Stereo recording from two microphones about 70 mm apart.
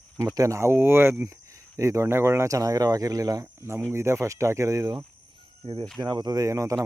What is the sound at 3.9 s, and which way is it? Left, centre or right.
Speech, right.